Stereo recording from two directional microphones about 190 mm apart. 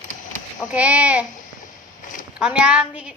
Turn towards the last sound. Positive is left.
turn(degrees=-5)  # may be behind; listen again after turning